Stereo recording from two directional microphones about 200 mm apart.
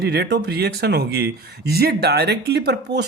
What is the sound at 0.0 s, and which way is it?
Speech, 55° right (ahead or behind).